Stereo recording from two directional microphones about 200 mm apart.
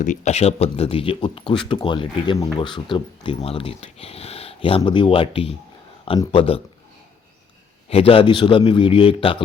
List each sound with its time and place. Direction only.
0.0 s speech: 40° left (ahead or behind)
7.9 s speech: 30° left (ahead or behind)